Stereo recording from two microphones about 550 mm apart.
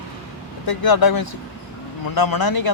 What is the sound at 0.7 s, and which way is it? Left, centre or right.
Speech, left.